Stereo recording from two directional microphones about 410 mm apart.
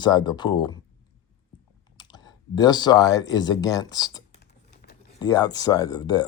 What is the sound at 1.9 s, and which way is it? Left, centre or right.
Speech, centre.